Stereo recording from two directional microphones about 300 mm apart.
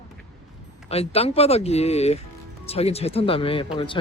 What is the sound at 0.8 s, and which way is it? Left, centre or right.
A man's voice, centre.